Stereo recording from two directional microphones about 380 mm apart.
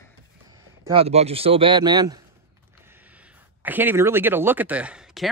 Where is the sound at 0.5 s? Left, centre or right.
Centre.